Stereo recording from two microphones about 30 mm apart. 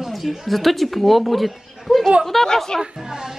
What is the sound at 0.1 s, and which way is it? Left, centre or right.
Speech, centre.